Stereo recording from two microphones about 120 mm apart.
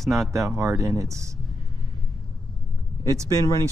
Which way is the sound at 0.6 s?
25° right (ahead or behind).